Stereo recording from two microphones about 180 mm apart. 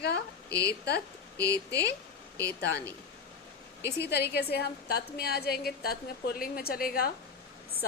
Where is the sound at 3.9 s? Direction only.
65° left (ahead or behind).